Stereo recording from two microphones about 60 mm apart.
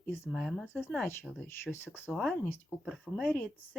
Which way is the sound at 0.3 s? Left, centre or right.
Centre.